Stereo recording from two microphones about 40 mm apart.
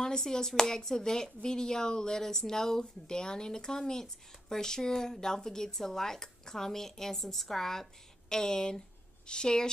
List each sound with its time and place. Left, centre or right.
0.0 s speech: centre